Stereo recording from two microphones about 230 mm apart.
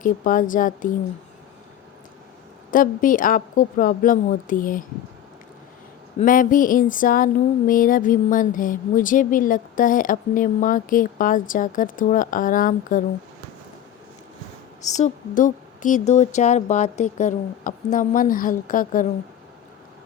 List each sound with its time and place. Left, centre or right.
0.0 s speech: left
2.7 s speech: left
6.1 s speech: left
14.8 s speech: left